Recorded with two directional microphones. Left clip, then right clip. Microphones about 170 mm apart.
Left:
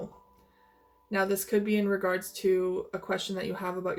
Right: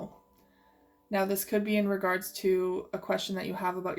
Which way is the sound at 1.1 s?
40° right (ahead or behind).